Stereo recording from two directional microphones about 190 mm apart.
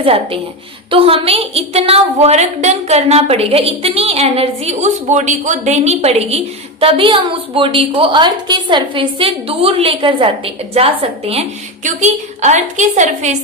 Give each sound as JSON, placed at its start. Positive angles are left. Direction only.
{"t": 0.0, "sound": "a woman's voice", "side_deg": -30}